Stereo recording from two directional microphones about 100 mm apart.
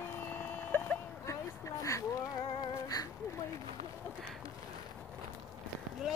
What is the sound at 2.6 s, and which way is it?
Music, 40° left (ahead or behind).